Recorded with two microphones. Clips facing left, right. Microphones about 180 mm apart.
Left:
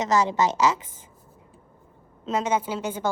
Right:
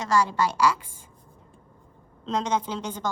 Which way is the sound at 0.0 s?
20° left (ahead or behind).